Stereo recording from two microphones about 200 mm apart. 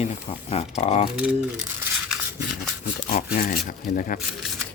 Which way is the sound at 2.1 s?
Centre (ahead or behind).